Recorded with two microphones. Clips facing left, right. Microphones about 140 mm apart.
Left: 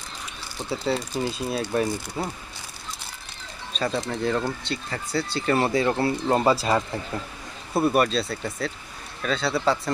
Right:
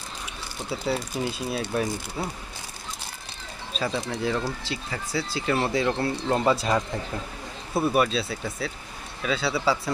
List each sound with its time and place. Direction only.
0.7 s speech: 5° right (ahead or behind)
3.7 s speech: 5° right (ahead or behind)
7.8 s speech: centre (ahead or behind)